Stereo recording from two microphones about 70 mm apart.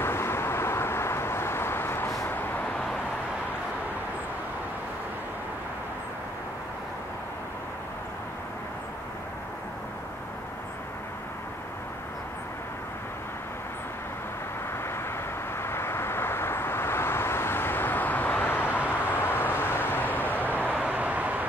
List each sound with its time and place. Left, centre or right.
0.0 s vehicle: left
15.6 s vehicle: left
20.7 s vehicle: centre